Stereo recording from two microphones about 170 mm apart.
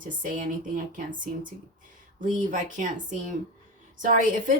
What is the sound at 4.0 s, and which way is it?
Speech, 50° right (ahead or behind).